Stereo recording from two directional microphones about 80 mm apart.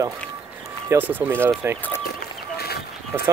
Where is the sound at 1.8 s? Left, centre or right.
Left.